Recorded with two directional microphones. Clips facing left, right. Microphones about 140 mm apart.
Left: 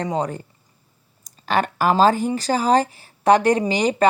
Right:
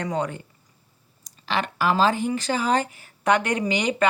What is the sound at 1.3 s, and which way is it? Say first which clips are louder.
Speech: left 5 dB; 45° left (ahead or behind).